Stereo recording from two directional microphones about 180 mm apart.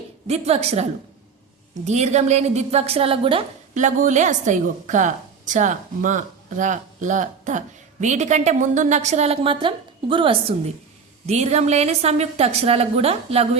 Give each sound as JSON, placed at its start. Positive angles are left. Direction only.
{"t": 0.3, "sound": "a woman's voice", "side_deg": -35}
{"t": 3.8, "sound": "a woman's voice", "side_deg": -40}